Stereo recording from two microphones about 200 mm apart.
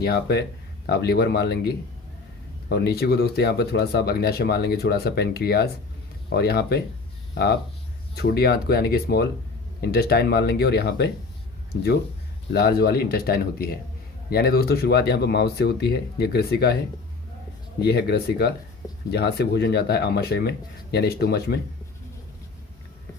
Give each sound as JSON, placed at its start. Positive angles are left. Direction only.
{"t": 0.0, "sound": "speech", "side_deg": 55}
{"t": 12.5, "sound": "speech", "side_deg": 50}
{"t": 17.7, "sound": "speech", "side_deg": 55}